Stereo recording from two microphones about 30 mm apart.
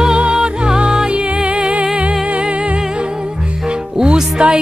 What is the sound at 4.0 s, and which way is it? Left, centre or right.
Music, right.